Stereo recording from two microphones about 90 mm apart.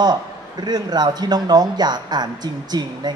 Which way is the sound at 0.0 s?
50° right (ahead or behind).